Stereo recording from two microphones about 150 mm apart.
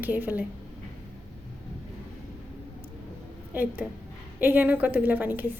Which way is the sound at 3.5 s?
10° right (ahead or behind).